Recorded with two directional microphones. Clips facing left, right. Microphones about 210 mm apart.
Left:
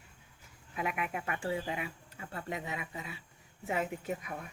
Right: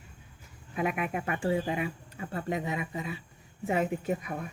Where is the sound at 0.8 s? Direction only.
30° right (ahead or behind).